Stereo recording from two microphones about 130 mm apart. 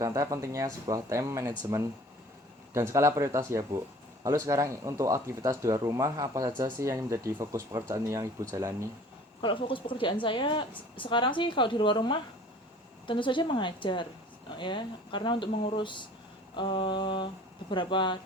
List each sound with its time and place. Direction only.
0.0 s speech: 25° right (ahead or behind)
2.7 s speech: 20° right (ahead or behind)
9.4 s a woman's voice: 40° left (ahead or behind)